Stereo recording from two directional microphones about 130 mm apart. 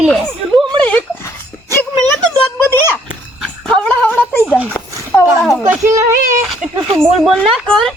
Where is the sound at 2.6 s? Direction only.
15° left (ahead or behind).